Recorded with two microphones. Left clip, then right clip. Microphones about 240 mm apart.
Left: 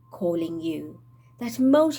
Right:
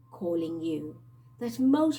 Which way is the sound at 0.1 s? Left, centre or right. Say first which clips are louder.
Left 4 dB; left.